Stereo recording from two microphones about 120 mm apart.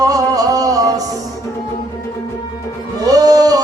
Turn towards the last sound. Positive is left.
turn(degrees=-30)  # may be behind; listen again after turning